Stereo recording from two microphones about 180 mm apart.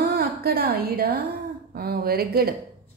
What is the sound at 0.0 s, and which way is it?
A woman's voice, 55° right (ahead or behind).